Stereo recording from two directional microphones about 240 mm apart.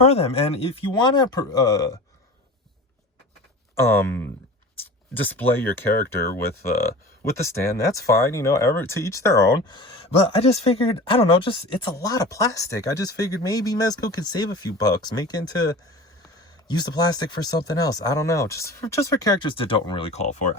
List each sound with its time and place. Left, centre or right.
0.0 s speech: left
3.8 s speech: centre; by 20.6 s left